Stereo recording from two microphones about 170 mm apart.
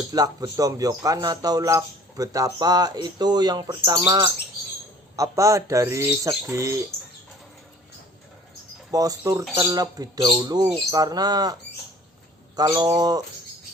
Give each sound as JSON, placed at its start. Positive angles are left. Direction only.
{"t": 0.1, "sound": "speech", "side_deg": -20}
{"t": 8.9, "sound": "speech", "side_deg": -20}
{"t": 12.5, "sound": "speech", "side_deg": -25}